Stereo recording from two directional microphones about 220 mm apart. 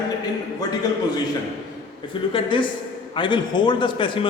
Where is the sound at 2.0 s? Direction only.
20° left (ahead or behind).